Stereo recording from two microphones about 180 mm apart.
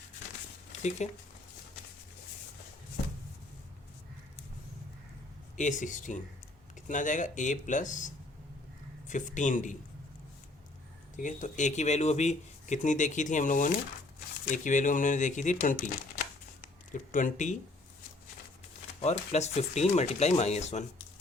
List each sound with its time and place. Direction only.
0.8 s speech: 40° left (ahead or behind)
5.5 s speech: 45° left (ahead or behind)
11.2 s speech: 45° left (ahead or behind)
16.9 s speech: 45° left (ahead or behind)
19.0 s speech: 35° left (ahead or behind)